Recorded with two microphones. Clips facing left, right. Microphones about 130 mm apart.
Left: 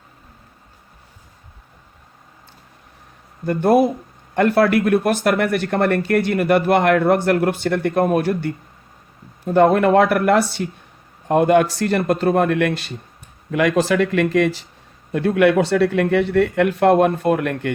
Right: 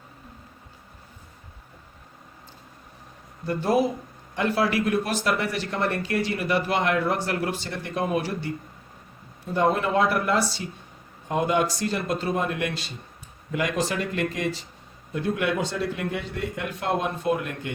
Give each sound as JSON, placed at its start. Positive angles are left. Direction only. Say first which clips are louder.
{"t": 3.4, "sound": "speech", "louder": "left 7 dB", "side_deg": 55}